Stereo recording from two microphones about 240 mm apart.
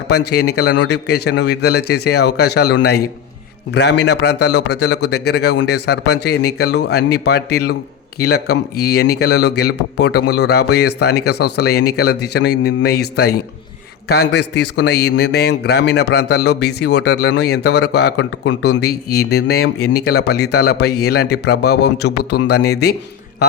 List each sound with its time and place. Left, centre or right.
0.3 s a man's voice: left